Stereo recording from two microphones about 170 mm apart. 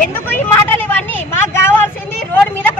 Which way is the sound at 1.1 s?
10° left (ahead or behind).